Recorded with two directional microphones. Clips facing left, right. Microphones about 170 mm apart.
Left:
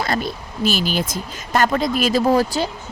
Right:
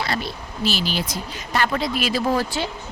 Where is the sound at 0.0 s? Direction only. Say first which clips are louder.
Left 4 dB; 45° left (ahead or behind).